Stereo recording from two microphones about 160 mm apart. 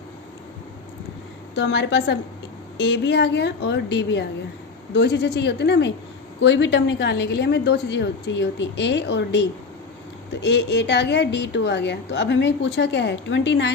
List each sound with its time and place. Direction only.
1.5 s a woman's voice: 90° left